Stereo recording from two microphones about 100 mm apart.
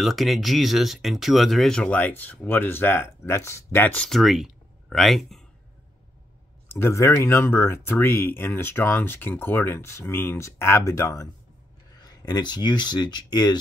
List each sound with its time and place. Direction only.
0.0 s speech: centre (ahead or behind); by 3.9 s 25° left (ahead or behind)
3.9 s speech: 5° left (ahead or behind)
6.7 s speech: 25° left (ahead or behind); by 13.6 s 45° left (ahead or behind)